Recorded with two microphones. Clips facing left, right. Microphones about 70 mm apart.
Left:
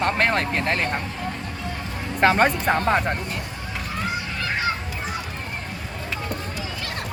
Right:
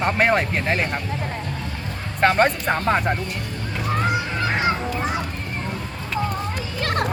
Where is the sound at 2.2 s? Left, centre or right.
Centre.